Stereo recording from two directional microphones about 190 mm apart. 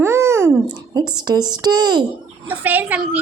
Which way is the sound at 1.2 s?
20° right (ahead or behind).